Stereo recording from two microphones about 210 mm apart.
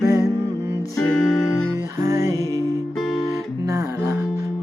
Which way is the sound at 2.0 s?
15° right (ahead or behind).